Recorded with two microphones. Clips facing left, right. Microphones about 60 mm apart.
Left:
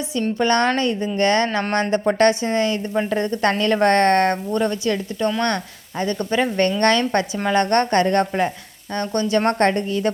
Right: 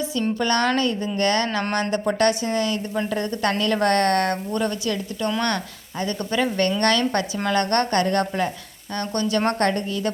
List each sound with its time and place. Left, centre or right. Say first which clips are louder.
0.1 s a woman's voice: left 6 dB; left